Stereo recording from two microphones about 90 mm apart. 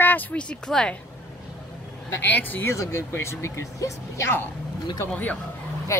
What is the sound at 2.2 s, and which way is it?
Speech, 20° left (ahead or behind).